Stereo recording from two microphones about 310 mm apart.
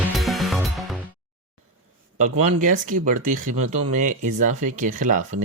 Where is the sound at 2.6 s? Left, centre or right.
Right.